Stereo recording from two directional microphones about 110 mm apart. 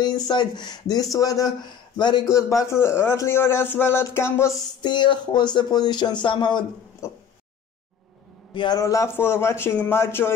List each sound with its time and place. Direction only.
0.3 s a man's voice: 40° left (ahead or behind); by 4.6 s 25° left (ahead or behind)
4.8 s speech: 45° left (ahead or behind)
7.0 s a man's voice: 30° left (ahead or behind)
8.5 s a man's voice: 35° left (ahead or behind); by 10.3 s 20° left (ahead or behind)